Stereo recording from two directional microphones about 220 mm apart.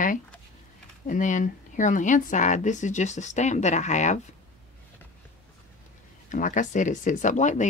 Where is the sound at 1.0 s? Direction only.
35° left (ahead or behind).